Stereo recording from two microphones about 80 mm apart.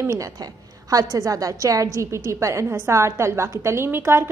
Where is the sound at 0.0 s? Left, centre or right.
Right.